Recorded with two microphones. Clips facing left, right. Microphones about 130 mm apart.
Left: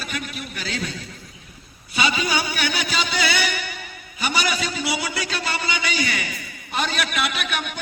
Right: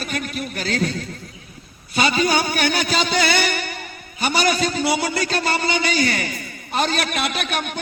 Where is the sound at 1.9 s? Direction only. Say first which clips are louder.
Right 4 dB; 45° right (ahead or behind).